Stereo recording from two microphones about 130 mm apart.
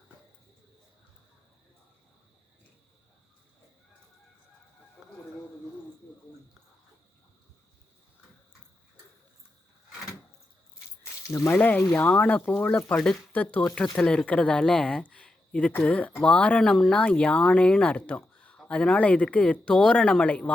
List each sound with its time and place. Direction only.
5.0 s chicken: 5° right (ahead or behind)
11.0 s a sound: 20° left (ahead or behind)
11.5 s speech: 10° left (ahead or behind)